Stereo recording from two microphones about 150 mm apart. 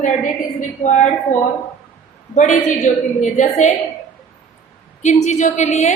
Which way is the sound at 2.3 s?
55° left (ahead or behind).